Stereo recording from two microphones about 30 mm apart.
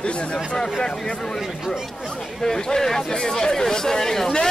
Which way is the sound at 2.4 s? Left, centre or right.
Centre.